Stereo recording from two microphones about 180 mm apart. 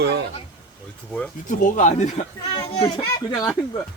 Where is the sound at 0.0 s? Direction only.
70° right (ahead or behind).